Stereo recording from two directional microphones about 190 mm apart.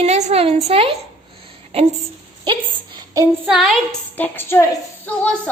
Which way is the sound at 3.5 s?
Centre (ahead or behind).